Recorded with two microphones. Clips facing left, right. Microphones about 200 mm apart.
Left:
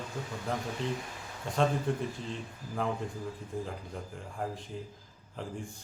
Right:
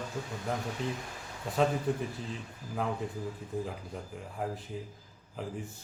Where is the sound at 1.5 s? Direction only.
5° right (ahead or behind).